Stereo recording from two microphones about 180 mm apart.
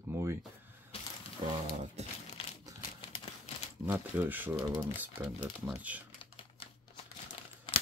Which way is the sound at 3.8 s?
10° right (ahead or behind).